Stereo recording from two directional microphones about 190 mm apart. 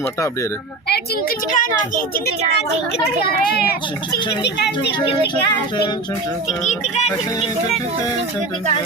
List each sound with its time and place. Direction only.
0.9 s a woman's voice: 55° left (ahead or behind)
4.9 s speech: 25° left (ahead or behind)
6.7 s music: 35° left (ahead or behind)